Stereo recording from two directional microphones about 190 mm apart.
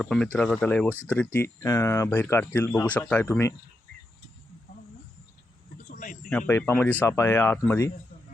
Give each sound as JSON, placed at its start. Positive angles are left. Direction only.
{"t": 0.0, "sound": "speech", "side_deg": 5}
{"t": 5.9, "sound": "a sound", "side_deg": 45}
{"t": 6.5, "sound": "speech", "side_deg": 15}